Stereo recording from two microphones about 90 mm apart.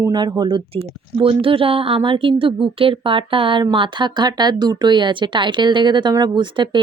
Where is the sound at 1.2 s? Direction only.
80° right.